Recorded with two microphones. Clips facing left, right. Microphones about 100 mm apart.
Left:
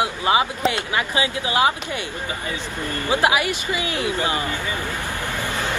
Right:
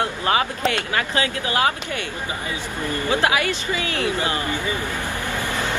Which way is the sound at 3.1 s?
20° left (ahead or behind).